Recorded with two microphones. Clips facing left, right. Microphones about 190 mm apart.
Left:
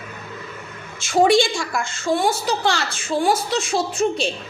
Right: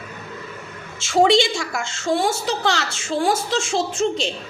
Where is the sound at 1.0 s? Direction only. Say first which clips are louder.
Even; 25° right (ahead or behind).